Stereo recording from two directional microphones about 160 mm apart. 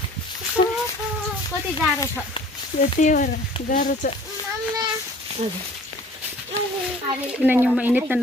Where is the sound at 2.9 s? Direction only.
55° left (ahead or behind).